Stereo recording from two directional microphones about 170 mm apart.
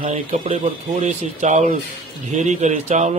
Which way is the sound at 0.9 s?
50° right (ahead or behind).